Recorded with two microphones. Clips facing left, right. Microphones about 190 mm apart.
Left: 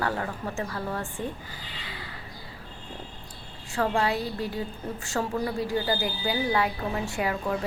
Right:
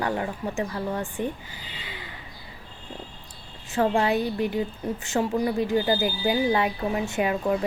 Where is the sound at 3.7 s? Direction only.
20° right (ahead or behind).